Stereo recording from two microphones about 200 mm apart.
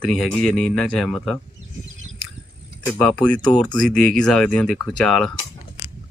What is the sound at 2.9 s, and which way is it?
Speech, 10° left (ahead or behind).